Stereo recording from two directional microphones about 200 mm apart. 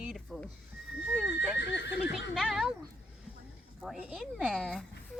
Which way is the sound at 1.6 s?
60° left (ahead or behind).